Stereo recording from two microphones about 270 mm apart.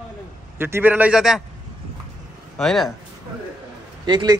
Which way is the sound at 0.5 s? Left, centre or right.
Centre.